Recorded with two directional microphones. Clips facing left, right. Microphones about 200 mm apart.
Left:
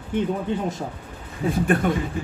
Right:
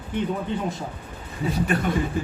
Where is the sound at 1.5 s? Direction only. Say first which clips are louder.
Left 3 dB; 50° left (ahead or behind).